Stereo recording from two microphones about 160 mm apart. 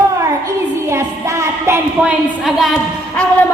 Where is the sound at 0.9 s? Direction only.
15° right (ahead or behind).